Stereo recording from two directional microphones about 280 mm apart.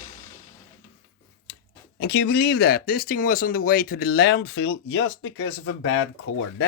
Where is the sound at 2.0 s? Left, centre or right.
Left.